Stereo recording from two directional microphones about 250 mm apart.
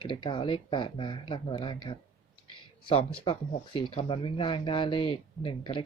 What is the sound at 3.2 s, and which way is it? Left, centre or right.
Speech, left.